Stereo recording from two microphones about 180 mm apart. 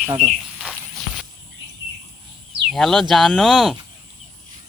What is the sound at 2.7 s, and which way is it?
Speech, centre (ahead or behind).